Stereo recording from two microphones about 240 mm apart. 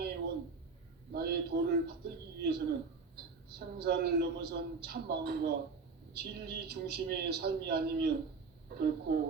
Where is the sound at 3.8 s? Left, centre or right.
Right.